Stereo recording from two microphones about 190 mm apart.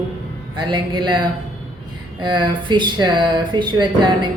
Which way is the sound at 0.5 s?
25° right (ahead or behind).